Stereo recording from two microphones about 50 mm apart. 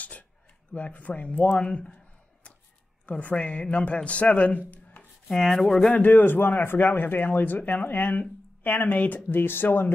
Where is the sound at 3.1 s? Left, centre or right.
Left.